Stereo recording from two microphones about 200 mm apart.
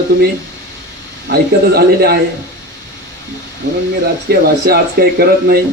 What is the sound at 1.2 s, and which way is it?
Speech, 50° right (ahead or behind).